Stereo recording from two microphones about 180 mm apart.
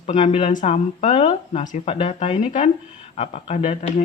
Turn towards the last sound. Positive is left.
turn(degrees=40)  # may be behind; listen again after turning